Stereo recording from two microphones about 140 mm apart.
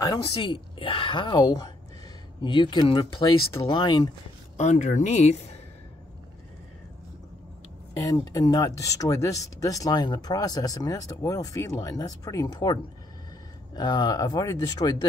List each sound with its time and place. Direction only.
0.0 s speech: 35° left (ahead or behind)
4.6 s speech: 55° left (ahead or behind)
8.0 s speech: 25° left (ahead or behind)
13.7 s speech: 30° left (ahead or behind)